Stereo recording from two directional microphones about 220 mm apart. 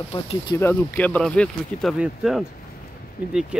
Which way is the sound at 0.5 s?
10° left (ahead or behind).